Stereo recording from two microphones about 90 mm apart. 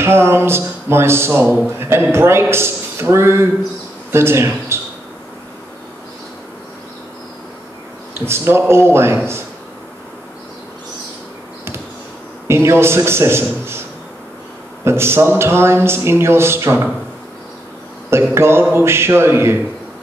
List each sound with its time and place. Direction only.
0.0 s speech: 25° right (ahead or behind)
8.3 s speech: 30° right (ahead or behind)
12.4 s speech: 30° right (ahead or behind)
14.9 s speech: 30° right (ahead or behind)
18.3 s speech: 30° right (ahead or behind)